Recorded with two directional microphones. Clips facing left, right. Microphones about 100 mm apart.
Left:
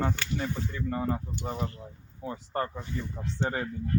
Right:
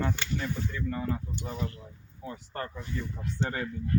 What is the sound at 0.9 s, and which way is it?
Speech, 35° left (ahead or behind).